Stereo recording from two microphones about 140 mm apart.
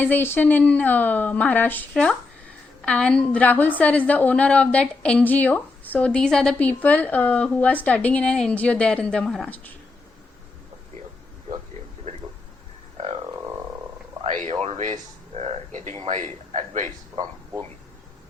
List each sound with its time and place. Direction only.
0.0 s a woman's voice: 15° left (ahead or behind)
14.6 s speech: 55° right (ahead or behind)
15.4 s a sound: 50° right (ahead or behind)
16.0 s a man's voice: 60° right (ahead or behind)